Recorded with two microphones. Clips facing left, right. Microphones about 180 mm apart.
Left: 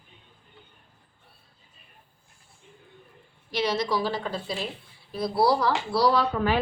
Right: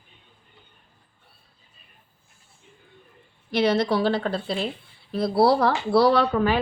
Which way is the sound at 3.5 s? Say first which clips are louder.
Right 5 dB; 55° right (ahead or behind).